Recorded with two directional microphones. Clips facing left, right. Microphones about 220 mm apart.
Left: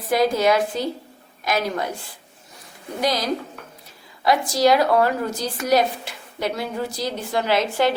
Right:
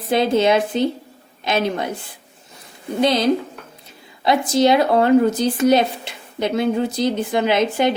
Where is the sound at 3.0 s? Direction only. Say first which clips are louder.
Right 6 dB; 25° right (ahead or behind).